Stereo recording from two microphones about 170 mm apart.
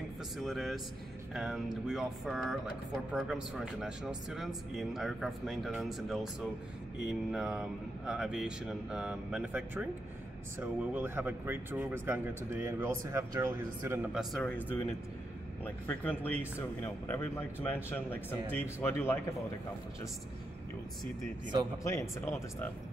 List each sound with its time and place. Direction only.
0.4 s speech: centre (ahead or behind)
7.2 s a man's voice: centre (ahead or behind)
14.1 s speech: 5° left (ahead or behind)
21.8 s speech: 15° left (ahead or behind)